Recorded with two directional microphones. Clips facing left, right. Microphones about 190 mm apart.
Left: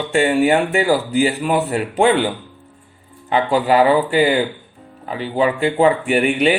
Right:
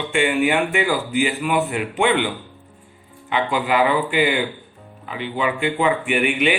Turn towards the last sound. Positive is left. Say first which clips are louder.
# left 4 dB
turn(degrees=40)  # may be behind; listen again after turning